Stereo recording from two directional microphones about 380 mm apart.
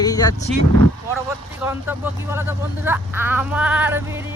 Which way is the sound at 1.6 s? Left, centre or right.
Centre.